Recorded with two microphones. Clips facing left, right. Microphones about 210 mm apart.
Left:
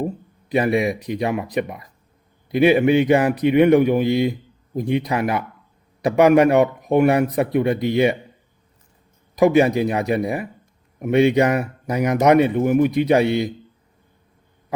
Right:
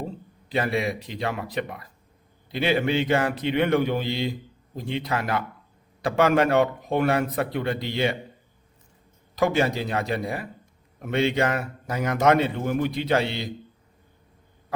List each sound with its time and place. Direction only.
0.5 s a man's voice: 20° left (ahead or behind)
9.4 s a man's voice: 15° left (ahead or behind)